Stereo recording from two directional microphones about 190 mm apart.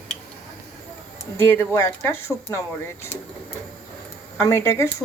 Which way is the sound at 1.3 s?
15° left (ahead or behind).